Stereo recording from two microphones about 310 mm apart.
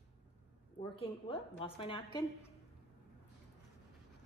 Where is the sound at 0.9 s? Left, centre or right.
Centre.